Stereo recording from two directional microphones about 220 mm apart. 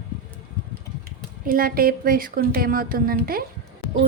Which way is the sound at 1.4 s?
40° right (ahead or behind).